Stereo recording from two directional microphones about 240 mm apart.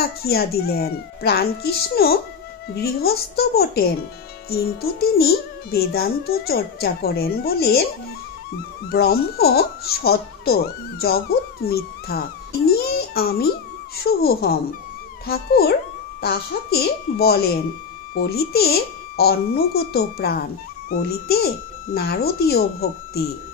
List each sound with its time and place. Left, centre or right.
0.2 s speech: left
8.8 s speech: left